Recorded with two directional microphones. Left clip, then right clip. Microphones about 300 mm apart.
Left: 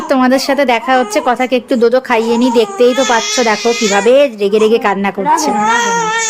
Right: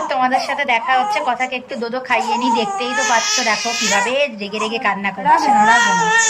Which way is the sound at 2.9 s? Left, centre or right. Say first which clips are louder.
Left 4 dB; centre.